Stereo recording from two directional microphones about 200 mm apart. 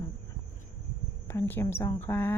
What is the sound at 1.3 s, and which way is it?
A woman's voice, 10° left (ahead or behind).